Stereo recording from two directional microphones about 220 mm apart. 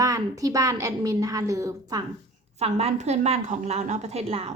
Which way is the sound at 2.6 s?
30° right (ahead or behind).